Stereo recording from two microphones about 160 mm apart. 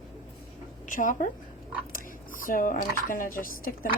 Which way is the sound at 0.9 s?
55° left (ahead or behind).